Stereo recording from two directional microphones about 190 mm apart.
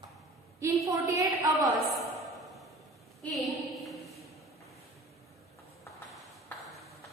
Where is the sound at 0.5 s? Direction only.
15° right (ahead or behind).